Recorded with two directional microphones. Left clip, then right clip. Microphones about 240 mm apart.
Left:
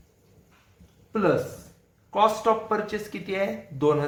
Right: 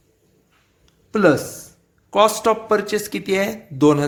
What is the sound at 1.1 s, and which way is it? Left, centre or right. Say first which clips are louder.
Speech: right 7 dB; right.